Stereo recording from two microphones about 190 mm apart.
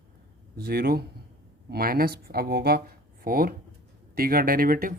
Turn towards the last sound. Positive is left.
turn(degrees=-50)  # may be behind; listen again after turning